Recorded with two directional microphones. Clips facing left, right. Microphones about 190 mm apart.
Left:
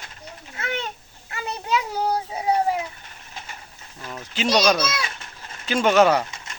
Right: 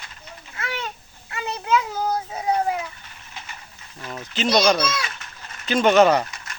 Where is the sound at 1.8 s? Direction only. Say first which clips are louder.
Even; 15° left (ahead or behind).